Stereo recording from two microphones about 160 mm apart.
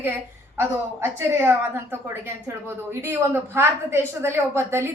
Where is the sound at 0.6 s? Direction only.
15° right (ahead or behind).